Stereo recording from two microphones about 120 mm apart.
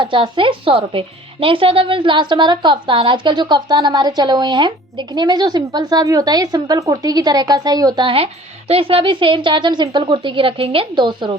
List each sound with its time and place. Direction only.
0.0 s a woman's voice: 45° right (ahead or behind)